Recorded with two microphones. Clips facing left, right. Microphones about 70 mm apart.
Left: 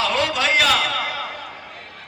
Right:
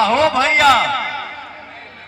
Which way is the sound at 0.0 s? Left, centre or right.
Right.